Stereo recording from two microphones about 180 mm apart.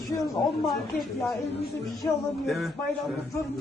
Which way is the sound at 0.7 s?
Centre (ahead or behind).